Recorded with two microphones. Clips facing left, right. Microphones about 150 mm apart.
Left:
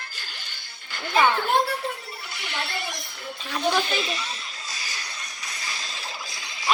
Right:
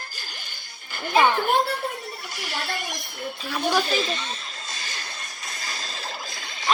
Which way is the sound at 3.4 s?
5° right (ahead or behind).